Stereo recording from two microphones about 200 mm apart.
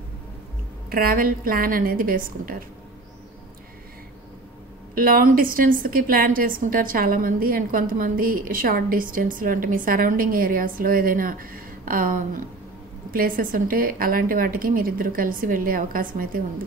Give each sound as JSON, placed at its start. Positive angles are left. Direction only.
{"t": 0.8, "sound": "a woman's voice", "side_deg": -45}
{"t": 4.9, "sound": "a woman's voice", "side_deg": -45}